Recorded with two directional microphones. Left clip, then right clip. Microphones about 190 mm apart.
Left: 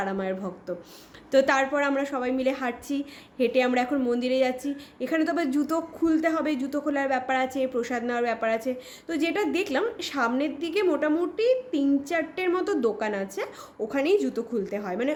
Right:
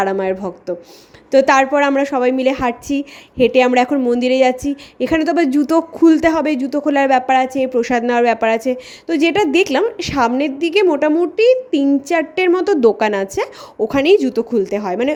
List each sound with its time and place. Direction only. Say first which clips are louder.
0.0 s speech: right 12 dB; 40° right (ahead or behind)